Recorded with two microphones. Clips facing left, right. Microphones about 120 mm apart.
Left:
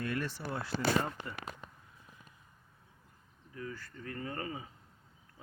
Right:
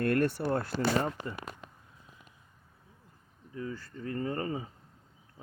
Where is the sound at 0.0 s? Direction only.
60° right (ahead or behind).